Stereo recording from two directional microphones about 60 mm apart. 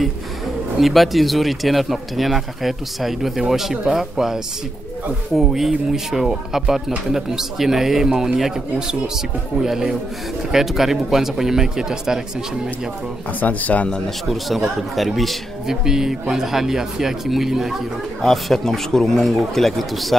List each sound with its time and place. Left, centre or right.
0.7 s a man's voice: centre
13.4 s speech: left
14.0 s speech: centre